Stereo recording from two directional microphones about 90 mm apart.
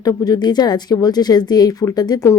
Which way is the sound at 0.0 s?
45° left (ahead or behind).